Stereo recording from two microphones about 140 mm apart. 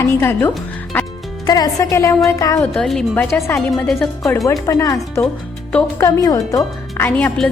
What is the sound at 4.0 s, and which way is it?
Speech, 20° left (ahead or behind).